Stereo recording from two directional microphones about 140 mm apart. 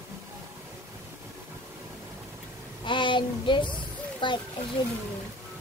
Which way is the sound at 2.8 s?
35° left (ahead or behind).